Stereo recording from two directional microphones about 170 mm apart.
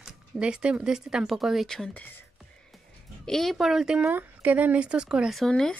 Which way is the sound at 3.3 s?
Centre (ahead or behind).